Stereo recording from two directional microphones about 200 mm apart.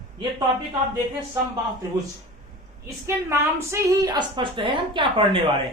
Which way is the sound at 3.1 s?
15° right (ahead or behind).